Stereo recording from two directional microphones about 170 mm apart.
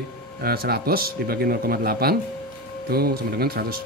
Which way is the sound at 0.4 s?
65° right (ahead or behind).